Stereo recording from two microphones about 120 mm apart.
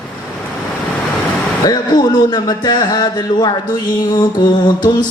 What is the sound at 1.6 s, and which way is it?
Speech, 35° left (ahead or behind).